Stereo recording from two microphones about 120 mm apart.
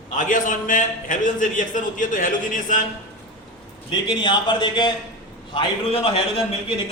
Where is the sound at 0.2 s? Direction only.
90° left.